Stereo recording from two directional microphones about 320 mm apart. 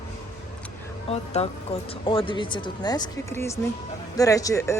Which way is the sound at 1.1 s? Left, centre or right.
Centre.